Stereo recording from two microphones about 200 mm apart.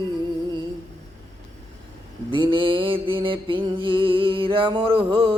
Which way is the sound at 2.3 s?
25° right (ahead or behind).